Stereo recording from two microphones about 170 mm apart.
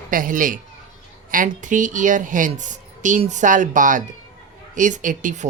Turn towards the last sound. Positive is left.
turn(degrees=-45)  # may be behind; listen again after turning